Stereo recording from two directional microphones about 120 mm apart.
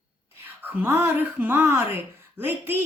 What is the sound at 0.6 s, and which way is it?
A woman's voice, 15° right (ahead or behind).